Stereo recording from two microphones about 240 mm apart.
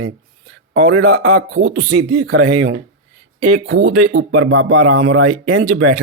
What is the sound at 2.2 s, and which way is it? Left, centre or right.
Speech, right.